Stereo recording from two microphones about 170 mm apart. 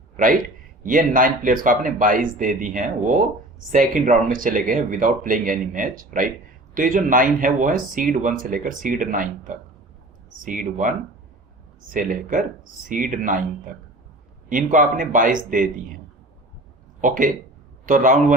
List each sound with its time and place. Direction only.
0.8 s speech: 55° right (ahead or behind)
17.0 s speech: 50° right (ahead or behind)